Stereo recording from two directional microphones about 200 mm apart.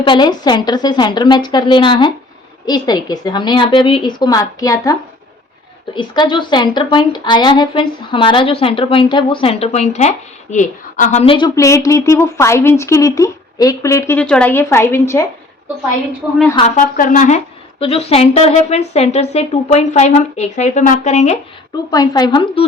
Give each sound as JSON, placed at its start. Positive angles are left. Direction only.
{"t": 0.0, "sound": "a woman's voice", "side_deg": 20}
{"t": 16.6, "sound": "a woman's voice", "side_deg": 35}
{"t": 21.8, "sound": "a woman's voice", "side_deg": 20}